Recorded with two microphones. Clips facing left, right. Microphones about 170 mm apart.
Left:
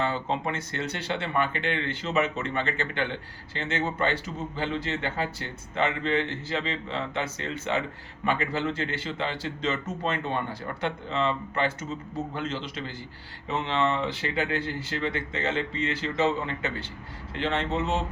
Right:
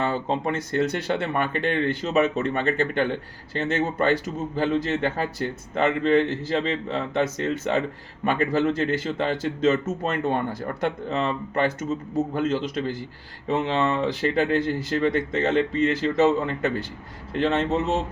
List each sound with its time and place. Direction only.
0.0 s speech: 40° right (ahead or behind)